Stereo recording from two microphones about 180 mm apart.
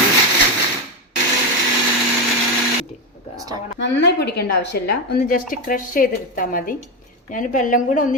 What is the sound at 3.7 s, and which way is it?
A woman's voice, 75° left (ahead or behind).